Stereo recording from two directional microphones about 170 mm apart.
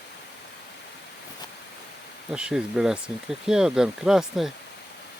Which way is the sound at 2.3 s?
5° right (ahead or behind).